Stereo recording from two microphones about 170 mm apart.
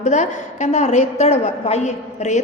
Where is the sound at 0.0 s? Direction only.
45° left (ahead or behind).